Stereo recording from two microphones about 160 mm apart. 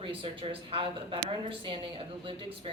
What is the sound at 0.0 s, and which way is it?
A woman's voice, 35° right (ahead or behind).